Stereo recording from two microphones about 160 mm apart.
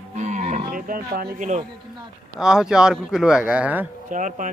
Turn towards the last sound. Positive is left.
turn(degrees=-55)  # may be behind; listen again after turning